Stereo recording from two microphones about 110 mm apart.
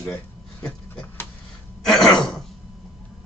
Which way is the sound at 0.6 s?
10° left (ahead or behind).